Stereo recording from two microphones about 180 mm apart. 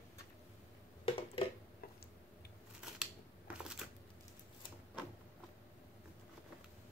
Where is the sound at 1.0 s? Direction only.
30° left (ahead or behind).